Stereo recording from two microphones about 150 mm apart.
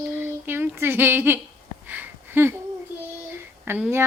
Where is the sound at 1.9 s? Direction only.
15° right (ahead or behind).